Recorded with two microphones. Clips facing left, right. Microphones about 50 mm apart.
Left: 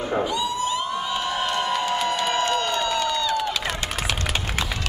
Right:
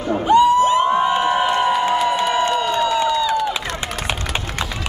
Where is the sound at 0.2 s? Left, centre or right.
Right.